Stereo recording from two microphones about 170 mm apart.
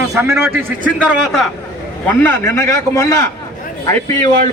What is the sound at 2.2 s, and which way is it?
A man's voice, 15° left (ahead or behind).